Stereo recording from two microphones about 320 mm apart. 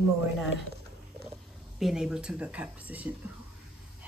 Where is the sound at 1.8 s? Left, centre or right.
Centre.